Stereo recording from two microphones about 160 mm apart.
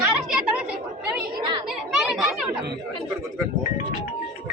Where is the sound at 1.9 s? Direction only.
5° right (ahead or behind).